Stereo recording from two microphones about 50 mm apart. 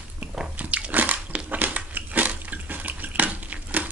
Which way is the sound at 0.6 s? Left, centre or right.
Right.